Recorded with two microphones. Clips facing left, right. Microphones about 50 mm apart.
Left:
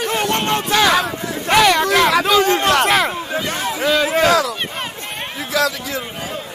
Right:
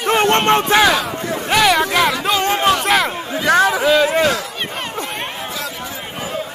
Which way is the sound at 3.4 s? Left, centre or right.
Right.